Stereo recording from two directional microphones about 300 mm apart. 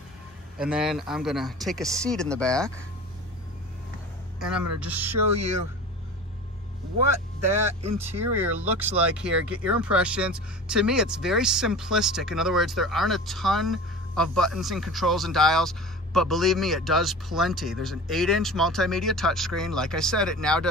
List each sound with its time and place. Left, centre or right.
0.6 s speech: centre
4.4 s a man's voice: centre
5.1 s speech: right
8.0 s speech: centre